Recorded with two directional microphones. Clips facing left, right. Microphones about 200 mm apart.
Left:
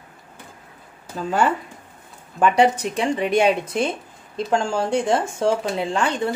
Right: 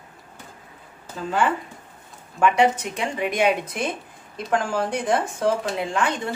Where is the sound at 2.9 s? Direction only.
30° left (ahead or behind).